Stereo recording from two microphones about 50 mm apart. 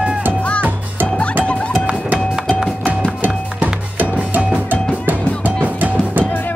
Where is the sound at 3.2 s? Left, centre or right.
Right.